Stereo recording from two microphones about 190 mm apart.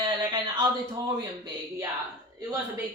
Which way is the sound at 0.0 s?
20° right (ahead or behind).